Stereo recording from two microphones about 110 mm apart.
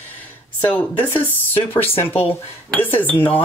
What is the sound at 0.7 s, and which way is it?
Speech, 15° left (ahead or behind).